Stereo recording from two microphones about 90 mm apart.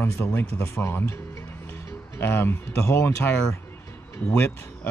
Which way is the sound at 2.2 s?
25° left (ahead or behind).